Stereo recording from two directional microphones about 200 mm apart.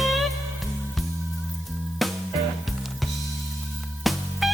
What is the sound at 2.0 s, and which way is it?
Music, centre (ahead or behind).